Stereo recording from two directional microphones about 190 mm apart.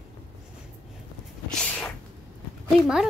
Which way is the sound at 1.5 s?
5° left (ahead or behind).